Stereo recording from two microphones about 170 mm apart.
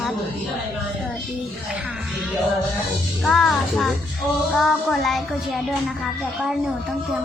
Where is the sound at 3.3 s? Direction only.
Centre (ahead or behind).